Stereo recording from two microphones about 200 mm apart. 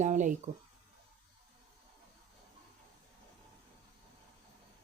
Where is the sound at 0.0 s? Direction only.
40° right (ahead or behind).